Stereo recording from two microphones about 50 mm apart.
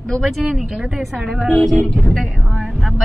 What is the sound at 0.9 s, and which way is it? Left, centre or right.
Speech, centre.